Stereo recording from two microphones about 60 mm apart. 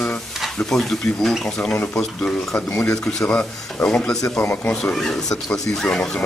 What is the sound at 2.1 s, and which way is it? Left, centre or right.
Speech, centre.